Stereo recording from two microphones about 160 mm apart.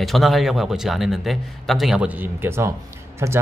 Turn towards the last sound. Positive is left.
turn(degrees=-15)  # may be behind; listen again after turning